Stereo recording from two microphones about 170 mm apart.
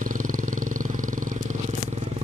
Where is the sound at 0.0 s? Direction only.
50° right (ahead or behind).